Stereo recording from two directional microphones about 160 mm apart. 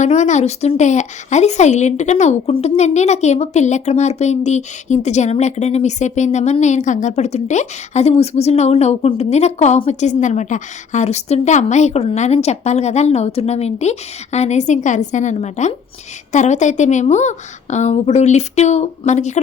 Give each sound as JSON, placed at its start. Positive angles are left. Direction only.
{"t": 0.0, "sound": "speech", "side_deg": 45}